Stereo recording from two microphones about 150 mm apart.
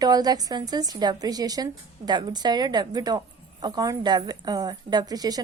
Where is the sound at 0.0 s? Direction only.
25° right (ahead or behind).